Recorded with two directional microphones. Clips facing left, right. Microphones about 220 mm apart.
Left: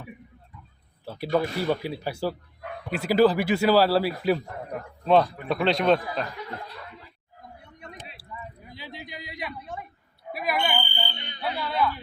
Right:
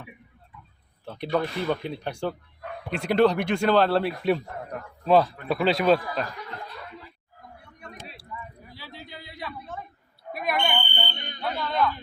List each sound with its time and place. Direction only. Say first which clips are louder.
1.0 s a man's voice: left 1 dB; 5° left (ahead or behind)
7.6 s a sound: right 1 dB; 20° left (ahead or behind)
10.3 s fire alarm: even; centre (ahead or behind)
11.3 s speech: right 1 dB; 5° left (ahead or behind)